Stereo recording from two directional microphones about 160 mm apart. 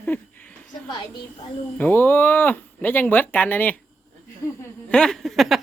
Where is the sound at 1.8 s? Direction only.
10° left (ahead or behind).